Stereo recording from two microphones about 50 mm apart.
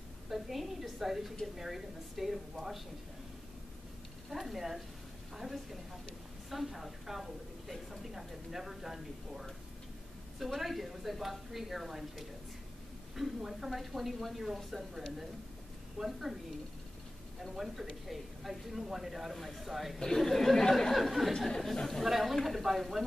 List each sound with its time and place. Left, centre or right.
0.3 s a woman's voice: centre
4.3 s speech: centre
10.4 s speech: centre
17.4 s speech: centre
20.0 s speech: centre